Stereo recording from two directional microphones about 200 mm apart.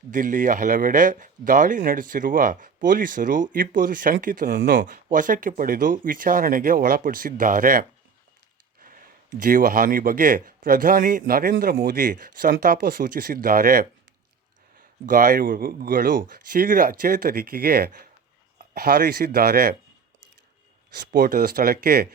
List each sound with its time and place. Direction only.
0.1 s speech: 40° right (ahead or behind)
9.4 s speech: 45° right (ahead or behind)
21.1 s speech: 45° right (ahead or behind)